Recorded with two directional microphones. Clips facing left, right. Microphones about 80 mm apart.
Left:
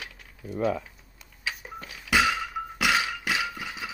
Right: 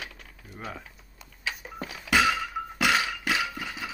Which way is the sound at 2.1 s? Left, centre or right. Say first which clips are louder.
Even; centre.